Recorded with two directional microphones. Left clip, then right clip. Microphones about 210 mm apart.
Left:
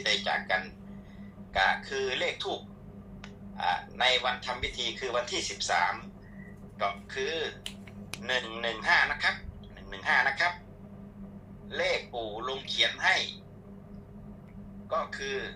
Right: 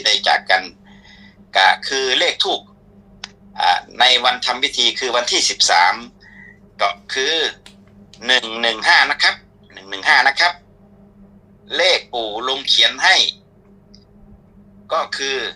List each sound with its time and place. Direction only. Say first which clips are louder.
0.0 s speech: right 13 dB; 55° right (ahead or behind)
11.7 s speech: right 14 dB; 55° right (ahead or behind)
14.8 s speech: right 12 dB; 55° right (ahead or behind)